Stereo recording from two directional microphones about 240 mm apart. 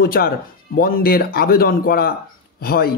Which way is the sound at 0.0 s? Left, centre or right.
Left.